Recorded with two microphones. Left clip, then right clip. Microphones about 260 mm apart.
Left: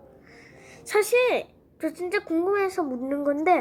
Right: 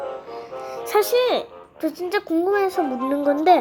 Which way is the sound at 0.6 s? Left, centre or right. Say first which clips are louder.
Right 17 dB; right.